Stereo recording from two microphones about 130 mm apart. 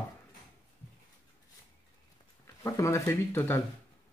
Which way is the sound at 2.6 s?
25° left (ahead or behind).